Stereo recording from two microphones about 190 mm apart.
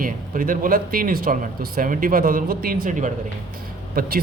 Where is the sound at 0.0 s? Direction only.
45° right (ahead or behind).